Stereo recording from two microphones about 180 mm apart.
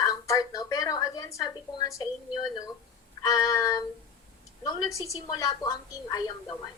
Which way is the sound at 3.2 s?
20° left (ahead or behind).